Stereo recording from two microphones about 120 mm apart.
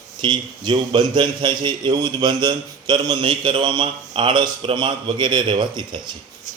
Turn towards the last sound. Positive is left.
turn(degrees=-40)  # may be behind; listen again after turning